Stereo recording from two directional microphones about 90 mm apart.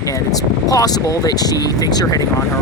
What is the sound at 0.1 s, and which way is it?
Speech, 40° left (ahead or behind).